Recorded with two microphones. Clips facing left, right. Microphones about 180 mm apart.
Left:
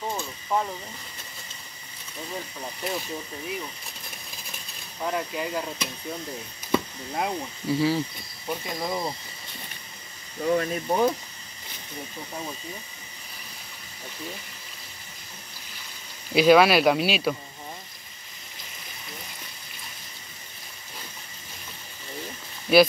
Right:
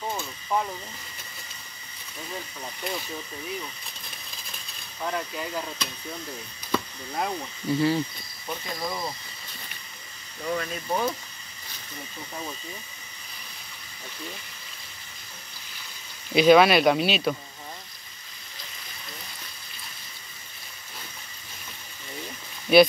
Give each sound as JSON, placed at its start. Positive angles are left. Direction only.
{"t": 0.1, "sound": "a sound", "side_deg": 5}
{"t": 2.3, "sound": "speech", "side_deg": 5}
{"t": 5.0, "sound": "speech", "side_deg": 5}
{"t": 7.2, "sound": "speech", "side_deg": 5}
{"t": 8.5, "sound": "speech", "side_deg": 15}
{"t": 10.4, "sound": "speech", "side_deg": 40}
{"t": 10.9, "sound": "speech", "side_deg": 20}
{"t": 16.3, "sound": "speech", "side_deg": 5}
{"t": 22.7, "sound": "speech", "side_deg": 5}